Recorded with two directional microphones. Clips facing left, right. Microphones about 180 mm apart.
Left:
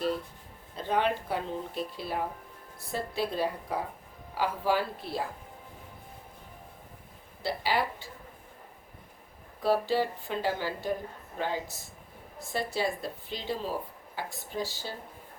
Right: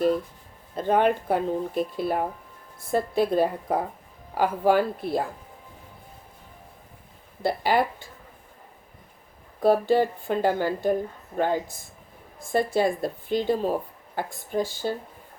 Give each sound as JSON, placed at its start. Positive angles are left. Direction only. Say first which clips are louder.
{"t": 0.8, "sound": "speech", "louder": "right 7 dB", "side_deg": -50}
{"t": 7.4, "sound": "speech", "louder": "right 7 dB", "side_deg": -50}
{"t": 9.6, "sound": "speech", "louder": "right 7 dB", "side_deg": -50}